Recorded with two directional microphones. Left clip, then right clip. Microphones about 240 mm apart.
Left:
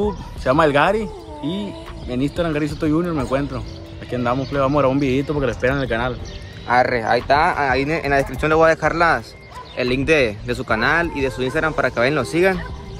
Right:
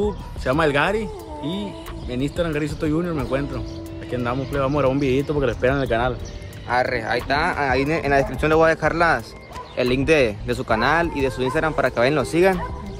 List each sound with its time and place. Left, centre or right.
0.4 s speech: centre
6.7 s speech: left
7.3 s speech: centre